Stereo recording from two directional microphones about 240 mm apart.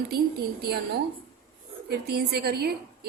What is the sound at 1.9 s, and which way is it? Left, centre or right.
A woman's voice, right.